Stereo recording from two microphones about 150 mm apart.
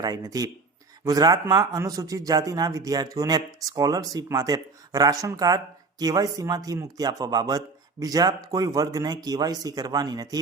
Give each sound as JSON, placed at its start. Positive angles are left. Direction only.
{"t": 0.0, "sound": "speech", "side_deg": -25}